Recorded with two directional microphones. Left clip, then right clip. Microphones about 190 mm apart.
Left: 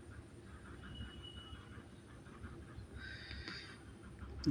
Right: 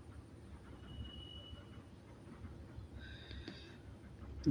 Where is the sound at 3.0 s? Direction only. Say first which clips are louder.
Left 5 dB; 15° right (ahead or behind).